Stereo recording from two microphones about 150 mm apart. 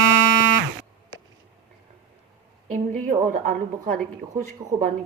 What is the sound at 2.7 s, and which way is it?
A woman's voice, 60° right (ahead or behind).